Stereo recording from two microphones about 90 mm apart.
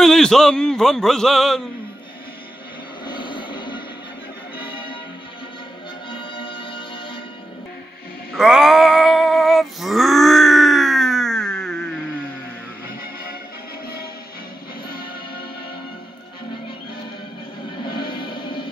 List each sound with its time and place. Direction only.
0.0 s a man's voice: 5° left (ahead or behind)
3.1 s a sound: 65° left (ahead or behind)
4.6 s music: 70° left (ahead or behind)
6.0 s music: 70° left (ahead or behind)
8.3 s music: 5° right (ahead or behind)
17.8 s music: 65° left (ahead or behind)